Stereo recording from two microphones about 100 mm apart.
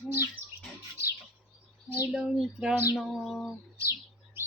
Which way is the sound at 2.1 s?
10° right (ahead or behind).